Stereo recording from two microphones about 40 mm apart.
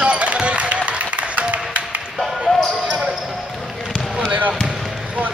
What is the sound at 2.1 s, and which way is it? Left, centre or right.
Basketball bounce, centre.